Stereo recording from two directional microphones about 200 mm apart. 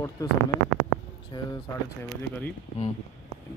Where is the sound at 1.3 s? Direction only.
20° left (ahead or behind).